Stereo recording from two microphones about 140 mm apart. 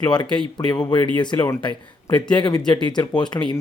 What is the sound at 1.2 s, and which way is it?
A man's voice, 30° left (ahead or behind).